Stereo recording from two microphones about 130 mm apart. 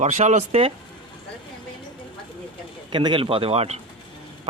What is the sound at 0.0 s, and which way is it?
Speech, 65° right (ahead or behind).